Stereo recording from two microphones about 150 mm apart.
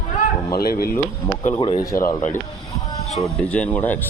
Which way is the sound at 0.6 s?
90° left.